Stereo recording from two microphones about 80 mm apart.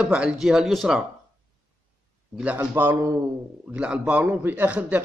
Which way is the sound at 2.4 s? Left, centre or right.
Centre.